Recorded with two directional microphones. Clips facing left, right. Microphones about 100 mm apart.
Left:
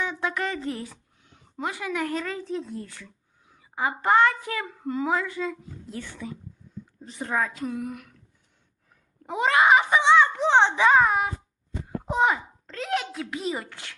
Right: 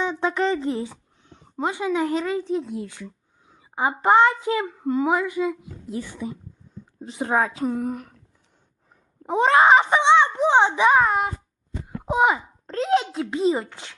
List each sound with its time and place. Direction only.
0.0 s a sound: 25° right (ahead or behind)
2.2 s a woman's voice: 5° right (ahead or behind)
7.2 s a woman's voice: 40° right (ahead or behind)
9.2 s a woman's voice: 25° right (ahead or behind)
11.0 s a child's voice: centre (ahead or behind)
12.0 s speech: 15° right (ahead or behind)
12.6 s a woman's voice: 30° right (ahead or behind)